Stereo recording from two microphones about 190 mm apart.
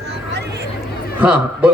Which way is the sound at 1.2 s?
5° right (ahead or behind).